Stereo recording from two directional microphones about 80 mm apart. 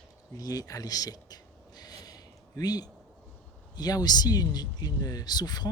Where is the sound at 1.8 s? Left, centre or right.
Left.